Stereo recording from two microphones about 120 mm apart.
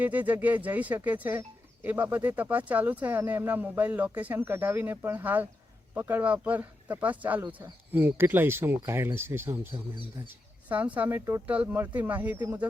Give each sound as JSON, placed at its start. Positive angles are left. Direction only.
{"t": 0.0, "sound": "speech", "side_deg": -15}